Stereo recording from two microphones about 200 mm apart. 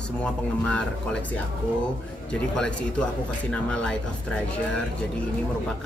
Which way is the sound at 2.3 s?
5° left (ahead or behind).